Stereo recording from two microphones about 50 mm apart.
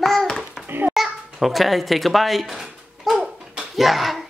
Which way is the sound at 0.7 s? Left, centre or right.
Right.